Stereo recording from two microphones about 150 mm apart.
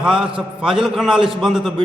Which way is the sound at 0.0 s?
5° right (ahead or behind).